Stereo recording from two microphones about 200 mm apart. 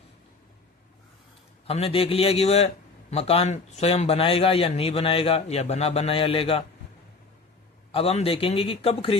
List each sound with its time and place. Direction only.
1.6 s speech: 30° left (ahead or behind)
7.9 s speech: 30° left (ahead or behind)